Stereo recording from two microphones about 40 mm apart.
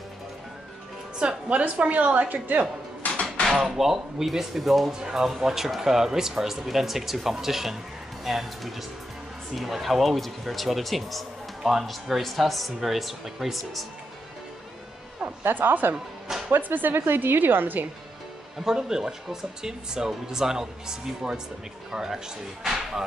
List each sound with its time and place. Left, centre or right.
1.2 s a woman's voice: right
1.6 s a woman's voice: right
3.0 s a sound: left
3.4 s speech: centre
5.0 s speech: centre
15.4 s a woman's voice: right
16.9 s a woman's voice: right
18.6 s speech: centre